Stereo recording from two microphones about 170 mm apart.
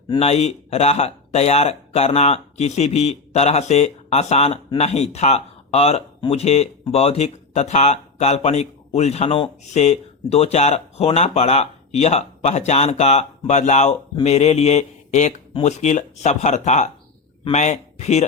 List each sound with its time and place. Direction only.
0.2 s speech: 40° left (ahead or behind)